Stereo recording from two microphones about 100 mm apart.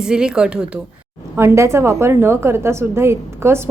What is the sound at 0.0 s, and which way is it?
Speech, 5° right (ahead or behind).